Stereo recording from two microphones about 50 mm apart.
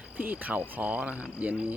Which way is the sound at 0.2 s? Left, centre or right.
Right.